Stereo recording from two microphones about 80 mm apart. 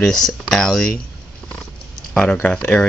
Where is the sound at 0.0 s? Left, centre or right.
Centre.